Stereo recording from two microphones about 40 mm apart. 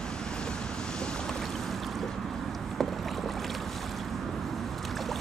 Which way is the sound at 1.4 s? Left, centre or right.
Centre.